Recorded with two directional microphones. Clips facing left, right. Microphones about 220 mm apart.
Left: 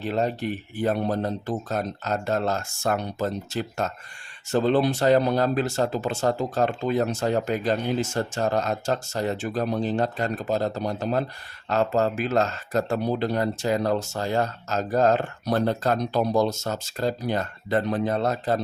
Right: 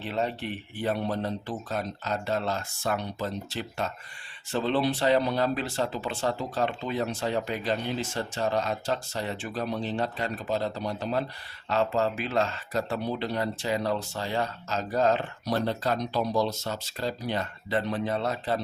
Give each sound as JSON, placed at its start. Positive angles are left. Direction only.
{"t": 0.0, "sound": "speech", "side_deg": 40}